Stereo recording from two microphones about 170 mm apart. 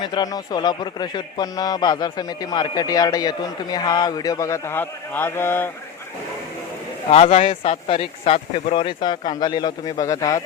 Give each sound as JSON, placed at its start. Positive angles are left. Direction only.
{"t": 0.0, "sound": "a man's voice", "side_deg": 25}
{"t": 7.1, "sound": "a man's voice", "side_deg": 35}